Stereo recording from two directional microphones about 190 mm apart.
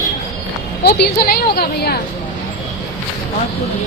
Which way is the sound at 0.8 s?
55° left (ahead or behind).